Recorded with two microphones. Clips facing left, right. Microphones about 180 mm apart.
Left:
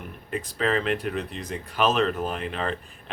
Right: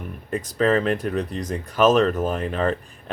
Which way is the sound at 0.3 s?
40° right (ahead or behind).